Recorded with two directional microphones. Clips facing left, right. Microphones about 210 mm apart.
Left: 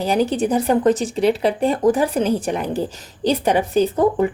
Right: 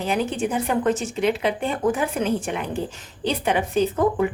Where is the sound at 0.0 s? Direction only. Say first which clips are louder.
Left 5 dB; 35° left (ahead or behind).